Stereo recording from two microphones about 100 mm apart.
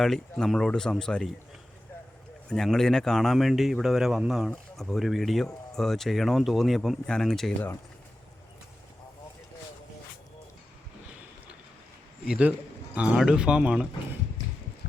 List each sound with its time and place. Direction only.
0.0 s speech: 5° left (ahead or behind)
2.5 s a man's voice: 5° left (ahead or behind)
12.4 s a man's voice: 15° right (ahead or behind)